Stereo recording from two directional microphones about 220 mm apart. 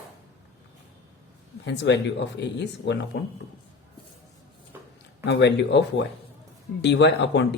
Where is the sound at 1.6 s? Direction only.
55° left (ahead or behind).